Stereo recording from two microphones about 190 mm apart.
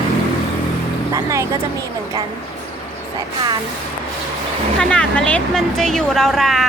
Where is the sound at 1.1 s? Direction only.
15° right (ahead or behind).